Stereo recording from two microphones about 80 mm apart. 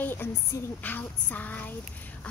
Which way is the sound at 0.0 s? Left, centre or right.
Left.